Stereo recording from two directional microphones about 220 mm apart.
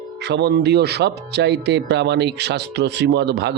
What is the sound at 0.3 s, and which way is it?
Speech, 50° right (ahead or behind).